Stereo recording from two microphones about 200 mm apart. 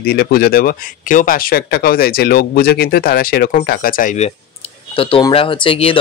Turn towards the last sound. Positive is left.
turn(degrees=25)  # may be behind; listen again after turning